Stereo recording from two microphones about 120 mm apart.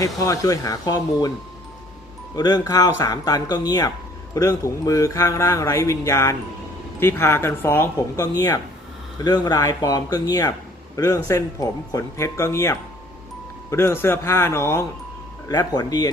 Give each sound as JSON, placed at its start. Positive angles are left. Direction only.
{"t": 0.0, "sound": "speech", "side_deg": 25}
{"t": 2.3, "sound": "speech", "side_deg": 30}